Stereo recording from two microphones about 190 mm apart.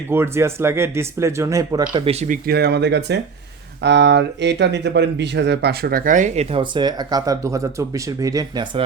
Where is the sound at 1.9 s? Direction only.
30° right (ahead or behind).